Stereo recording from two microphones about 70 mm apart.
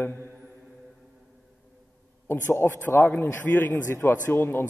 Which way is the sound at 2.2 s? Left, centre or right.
Left.